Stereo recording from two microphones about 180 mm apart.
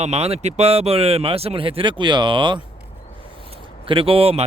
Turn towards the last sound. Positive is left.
turn(degrees=-35)  # may be behind; listen again after turning